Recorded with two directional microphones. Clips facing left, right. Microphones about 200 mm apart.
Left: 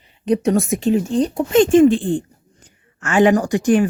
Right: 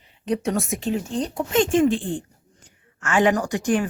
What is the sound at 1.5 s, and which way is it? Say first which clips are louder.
Speech: left 7 dB; 25° left (ahead or behind).